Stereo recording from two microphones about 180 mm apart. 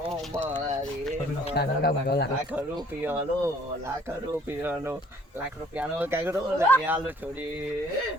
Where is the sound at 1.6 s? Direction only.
65° left (ahead or behind).